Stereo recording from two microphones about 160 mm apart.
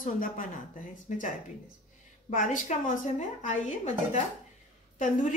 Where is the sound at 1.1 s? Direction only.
45° left (ahead or behind).